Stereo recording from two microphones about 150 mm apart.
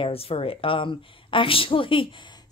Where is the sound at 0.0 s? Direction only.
40° left (ahead or behind).